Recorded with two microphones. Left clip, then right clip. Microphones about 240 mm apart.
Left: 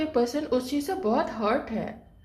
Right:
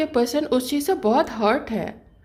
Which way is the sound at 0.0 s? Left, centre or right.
Right.